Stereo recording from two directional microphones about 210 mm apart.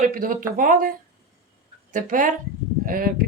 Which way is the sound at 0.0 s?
40° right (ahead or behind).